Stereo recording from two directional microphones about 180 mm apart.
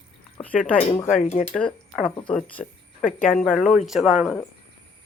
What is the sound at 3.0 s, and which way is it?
Speech, 50° left (ahead or behind).